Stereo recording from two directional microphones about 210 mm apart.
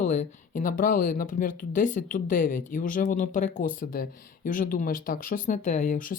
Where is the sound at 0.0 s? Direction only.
35° left (ahead or behind).